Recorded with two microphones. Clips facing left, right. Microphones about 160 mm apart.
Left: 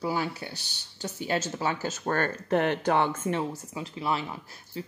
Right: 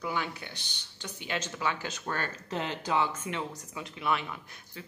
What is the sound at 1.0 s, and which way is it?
Speech, 40° left (ahead or behind).